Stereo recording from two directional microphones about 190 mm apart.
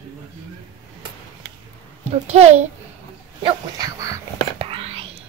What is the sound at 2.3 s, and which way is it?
Speech, 35° right (ahead or behind).